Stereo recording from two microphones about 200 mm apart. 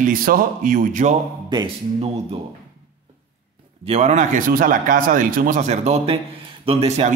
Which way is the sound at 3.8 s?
30° right (ahead or behind).